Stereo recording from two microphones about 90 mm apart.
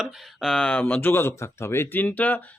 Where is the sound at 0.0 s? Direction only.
5° left (ahead or behind).